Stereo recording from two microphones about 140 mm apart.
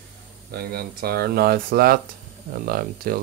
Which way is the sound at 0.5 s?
90° right.